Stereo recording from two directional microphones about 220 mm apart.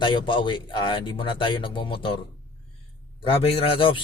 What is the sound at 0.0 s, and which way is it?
A man's voice, 20° left (ahead or behind).